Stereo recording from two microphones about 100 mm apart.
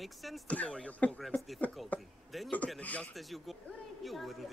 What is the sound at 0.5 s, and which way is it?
Speech, 10° left (ahead or behind).